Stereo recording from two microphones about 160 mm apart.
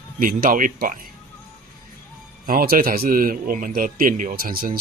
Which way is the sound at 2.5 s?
65° right (ahead or behind).